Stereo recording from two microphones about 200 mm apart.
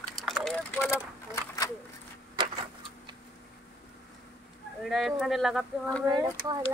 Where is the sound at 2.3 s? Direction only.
25° right (ahead or behind).